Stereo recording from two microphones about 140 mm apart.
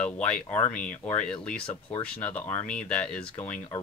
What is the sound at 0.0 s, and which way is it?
Speech, 10° left (ahead or behind).